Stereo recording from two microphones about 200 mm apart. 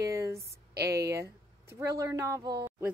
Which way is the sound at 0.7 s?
55° right (ahead or behind).